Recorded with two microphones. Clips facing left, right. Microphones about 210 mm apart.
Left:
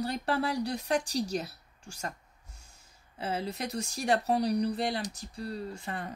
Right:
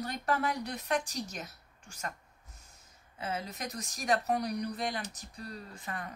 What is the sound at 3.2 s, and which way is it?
Speech, 30° left (ahead or behind).